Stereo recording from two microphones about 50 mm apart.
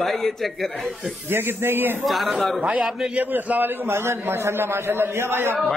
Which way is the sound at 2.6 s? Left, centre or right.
Right.